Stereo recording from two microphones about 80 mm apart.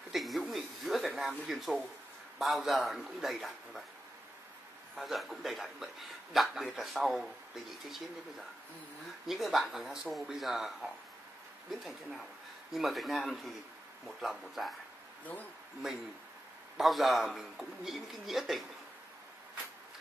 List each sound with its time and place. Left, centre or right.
0.1 s a sound: centre
1.1 s a man's voice: centre
4.9 s a man's voice: centre
9.3 s a man's voice: centre
16.7 s a man's voice: centre